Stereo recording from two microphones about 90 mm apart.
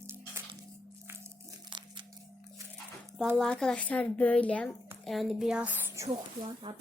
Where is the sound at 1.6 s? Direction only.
60° right (ahead or behind).